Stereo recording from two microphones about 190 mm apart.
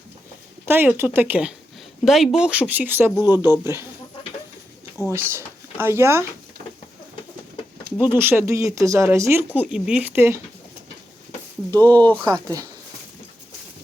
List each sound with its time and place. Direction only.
0.6 s speech: 10° right (ahead or behind)
5.1 s speech: 15° right (ahead or behind)
7.9 s speech: 10° right (ahead or behind)
9.6 s speech: 5° right (ahead or behind)
11.7 s speech: 10° left (ahead or behind)
12.2 s speech: 20° right (ahead or behind)